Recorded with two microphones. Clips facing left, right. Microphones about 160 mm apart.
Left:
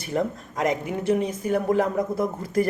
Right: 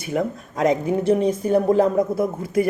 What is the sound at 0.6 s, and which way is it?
Speech, 30° right (ahead or behind).